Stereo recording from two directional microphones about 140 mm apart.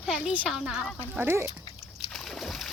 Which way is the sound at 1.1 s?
15° right (ahead or behind).